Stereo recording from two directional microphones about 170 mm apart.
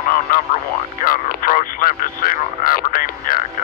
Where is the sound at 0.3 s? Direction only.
55° left (ahead or behind).